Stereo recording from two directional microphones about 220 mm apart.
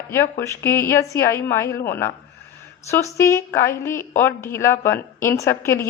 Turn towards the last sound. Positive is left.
turn(degrees=10)  # may be behind; listen again after turning